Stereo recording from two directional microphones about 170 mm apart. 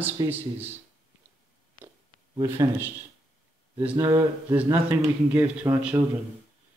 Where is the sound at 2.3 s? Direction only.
15° right (ahead or behind).